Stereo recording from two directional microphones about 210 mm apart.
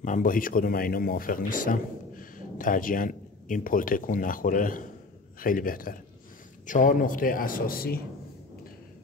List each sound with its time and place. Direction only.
0.0 s a man's voice: 40° left (ahead or behind)